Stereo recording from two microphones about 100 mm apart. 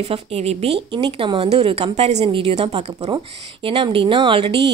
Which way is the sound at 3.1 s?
65° right (ahead or behind).